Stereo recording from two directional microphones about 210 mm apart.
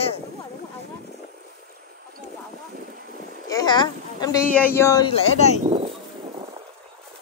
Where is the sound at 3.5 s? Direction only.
20° left (ahead or behind).